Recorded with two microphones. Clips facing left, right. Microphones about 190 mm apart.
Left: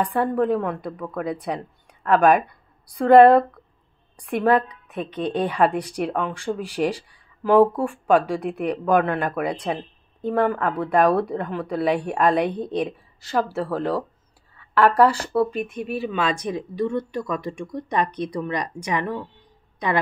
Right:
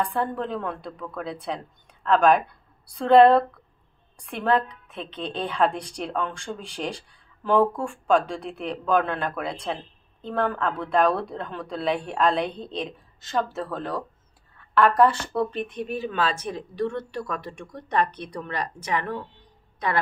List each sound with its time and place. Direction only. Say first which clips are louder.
0.0 s a woman's voice: left 5 dB; 10° left (ahead or behind)
7.6 s speech: left 5 dB; 35° left (ahead or behind)
8.1 s speech: left 3 dB; 10° left (ahead or behind)